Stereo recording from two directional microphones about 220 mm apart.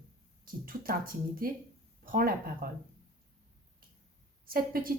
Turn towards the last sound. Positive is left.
turn(degrees=-40)  # may be behind; listen again after turning